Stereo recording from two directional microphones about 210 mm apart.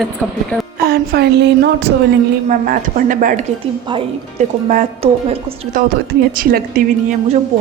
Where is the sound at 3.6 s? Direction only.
25° right (ahead or behind).